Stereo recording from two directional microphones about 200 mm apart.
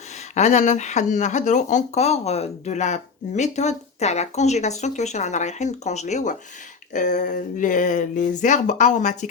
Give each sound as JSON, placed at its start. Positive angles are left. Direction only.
{"t": 0.3, "sound": "speech", "side_deg": 35}